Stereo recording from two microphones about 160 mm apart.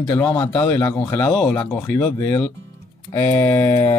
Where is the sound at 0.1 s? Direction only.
15° left (ahead or behind).